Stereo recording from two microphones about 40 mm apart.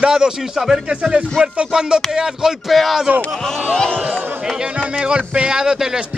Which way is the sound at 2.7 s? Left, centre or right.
Centre.